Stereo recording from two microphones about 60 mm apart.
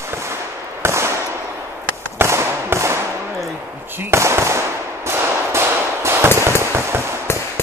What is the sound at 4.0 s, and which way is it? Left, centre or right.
Speech, right.